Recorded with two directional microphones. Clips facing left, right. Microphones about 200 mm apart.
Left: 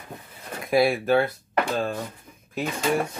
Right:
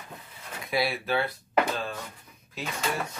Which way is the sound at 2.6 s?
55° left (ahead or behind).